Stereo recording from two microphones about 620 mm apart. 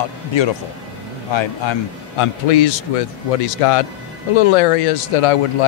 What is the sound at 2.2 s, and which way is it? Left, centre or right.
Speech, left.